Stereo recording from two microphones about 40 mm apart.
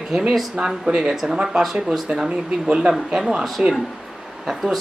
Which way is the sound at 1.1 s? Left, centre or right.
Centre.